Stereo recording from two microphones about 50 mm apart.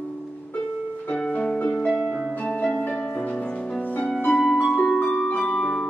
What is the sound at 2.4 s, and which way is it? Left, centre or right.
Music, left.